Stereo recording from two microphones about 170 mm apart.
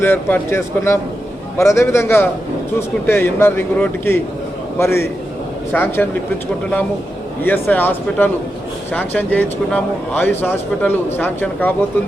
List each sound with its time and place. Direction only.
0.0 s speech: 15° left (ahead or behind)
7.4 s speech: 10° left (ahead or behind)